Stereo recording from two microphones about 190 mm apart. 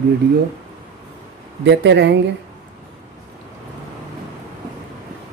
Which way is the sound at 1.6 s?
65° right (ahead or behind).